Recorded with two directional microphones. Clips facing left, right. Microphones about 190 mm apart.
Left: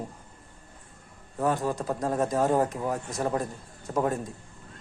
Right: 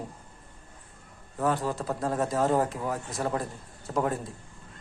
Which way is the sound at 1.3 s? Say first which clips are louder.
Left 1 dB; 15° left (ahead or behind).